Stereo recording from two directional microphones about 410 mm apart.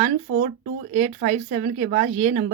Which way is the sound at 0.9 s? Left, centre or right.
Centre.